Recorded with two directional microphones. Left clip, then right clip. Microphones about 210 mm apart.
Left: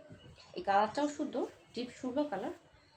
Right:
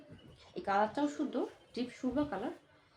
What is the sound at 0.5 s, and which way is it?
Speech, 15° right (ahead or behind).